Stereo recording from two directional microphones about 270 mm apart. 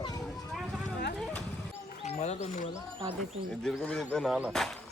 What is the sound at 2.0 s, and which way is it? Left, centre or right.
Bird, left.